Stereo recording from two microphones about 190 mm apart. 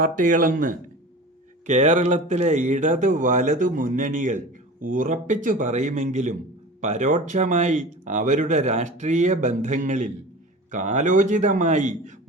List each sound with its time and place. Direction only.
0.0 s speech: 45° right (ahead or behind)